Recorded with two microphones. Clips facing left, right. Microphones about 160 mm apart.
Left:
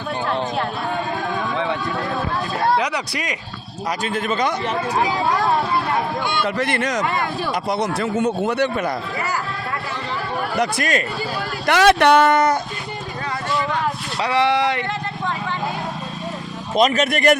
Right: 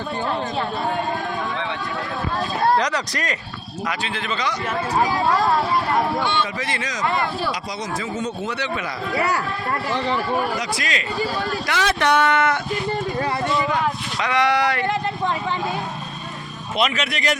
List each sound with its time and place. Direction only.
2.7 s speech: 10° left (ahead or behind)
3.8 s a man's voice: 45° left (ahead or behind)
6.4 s speech: 60° left (ahead or behind)
10.6 s a man's voice: 55° left (ahead or behind)
11.6 s speech: 65° left (ahead or behind)
12.3 s a sound: 40° left (ahead or behind)
14.2 s speech: 30° left (ahead or behind)
16.7 s a man's voice: 40° left (ahead or behind)